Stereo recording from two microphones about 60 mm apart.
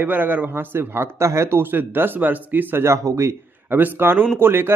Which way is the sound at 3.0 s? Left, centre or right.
Right.